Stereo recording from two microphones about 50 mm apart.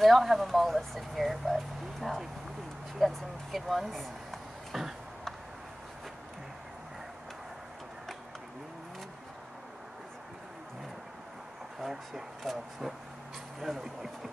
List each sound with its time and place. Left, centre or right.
0.0 s speech: centre
11.8 s speech: centre